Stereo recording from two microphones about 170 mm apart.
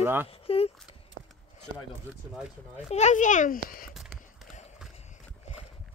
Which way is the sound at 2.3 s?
5° right (ahead or behind).